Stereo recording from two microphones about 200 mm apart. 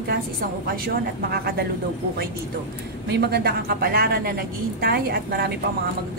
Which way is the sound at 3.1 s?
55° right (ahead or behind).